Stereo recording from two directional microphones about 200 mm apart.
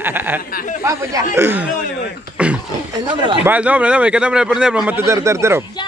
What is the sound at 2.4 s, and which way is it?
Throat clearing, 5° right (ahead or behind).